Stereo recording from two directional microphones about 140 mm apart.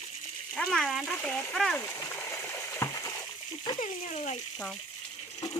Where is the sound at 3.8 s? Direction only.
55° left (ahead or behind).